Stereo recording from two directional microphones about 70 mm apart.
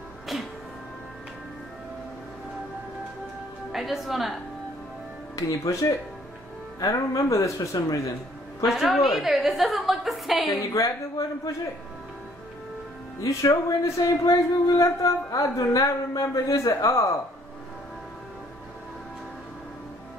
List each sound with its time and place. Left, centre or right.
0.3 s music: centre
3.7 s a woman's voice: centre
5.3 s speech: left
8.9 s a woman's voice: centre
10.6 s speech: left
13.2 s speech: left